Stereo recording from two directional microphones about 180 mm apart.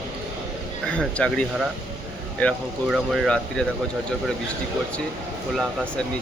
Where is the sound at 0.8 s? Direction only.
5° left (ahead or behind).